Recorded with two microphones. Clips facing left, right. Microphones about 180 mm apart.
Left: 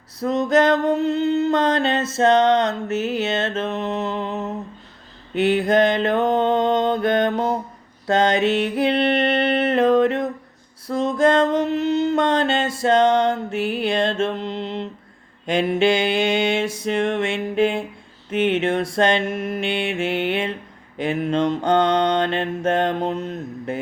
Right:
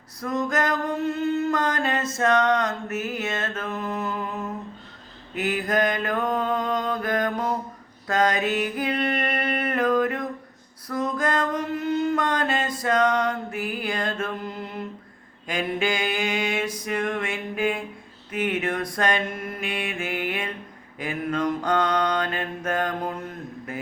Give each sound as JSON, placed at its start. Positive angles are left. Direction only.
{"t": 0.2, "sound": "mantra", "side_deg": 25}
{"t": 8.0, "sound": "music", "side_deg": 25}
{"t": 15.4, "sound": "mantra", "side_deg": 30}